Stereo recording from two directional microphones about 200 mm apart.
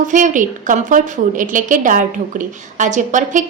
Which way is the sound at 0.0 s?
40° right (ahead or behind).